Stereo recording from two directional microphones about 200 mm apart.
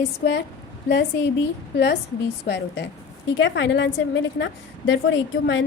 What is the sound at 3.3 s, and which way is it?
A woman's voice, 65° left (ahead or behind).